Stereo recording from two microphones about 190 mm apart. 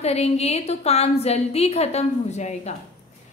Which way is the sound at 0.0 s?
35° left (ahead or behind).